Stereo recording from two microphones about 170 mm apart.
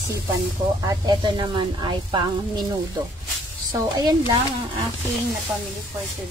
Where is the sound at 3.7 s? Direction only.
20° right (ahead or behind).